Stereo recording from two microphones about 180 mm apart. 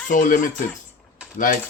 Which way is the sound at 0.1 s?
45° left (ahead or behind).